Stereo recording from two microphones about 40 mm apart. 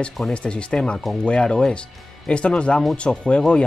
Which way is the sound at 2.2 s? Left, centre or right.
Left.